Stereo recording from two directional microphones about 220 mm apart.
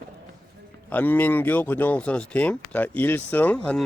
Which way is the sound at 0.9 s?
10° left (ahead or behind).